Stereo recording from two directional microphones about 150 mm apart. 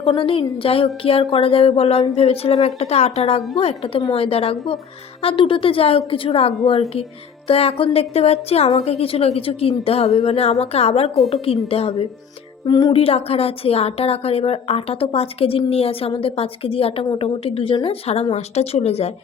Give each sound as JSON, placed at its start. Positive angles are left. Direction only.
{"t": 0.1, "sound": "a woman's voice", "side_deg": 35}
{"t": 12.6, "sound": "speech", "side_deg": 30}
{"t": 13.0, "sound": "a woman's voice", "side_deg": 40}